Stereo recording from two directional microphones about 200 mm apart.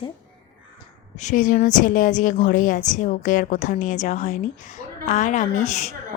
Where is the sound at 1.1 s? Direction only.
35° left (ahead or behind).